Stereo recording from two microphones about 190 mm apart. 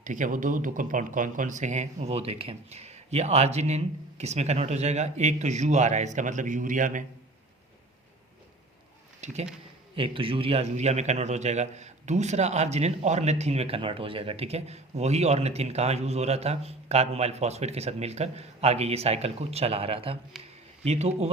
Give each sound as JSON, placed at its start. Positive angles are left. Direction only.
{"t": 0.0, "sound": "a man's voice", "side_deg": -40}
{"t": 9.2, "sound": "a man's voice", "side_deg": -35}